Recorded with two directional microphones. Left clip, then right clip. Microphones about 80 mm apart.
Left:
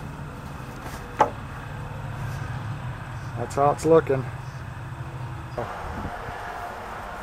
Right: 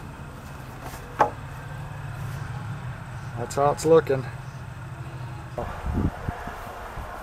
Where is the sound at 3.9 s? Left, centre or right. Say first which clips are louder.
Right 1 dB; centre.